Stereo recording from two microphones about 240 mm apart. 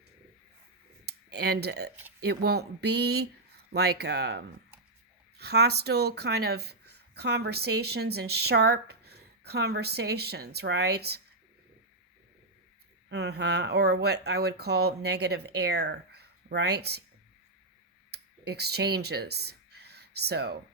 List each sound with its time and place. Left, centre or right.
1.0 s a sound: right
2.2 s speech: right
13.1 s speech: right
18.1 s speech: right